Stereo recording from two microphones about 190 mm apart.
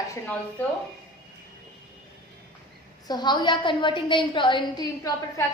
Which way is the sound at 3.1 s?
25° left (ahead or behind).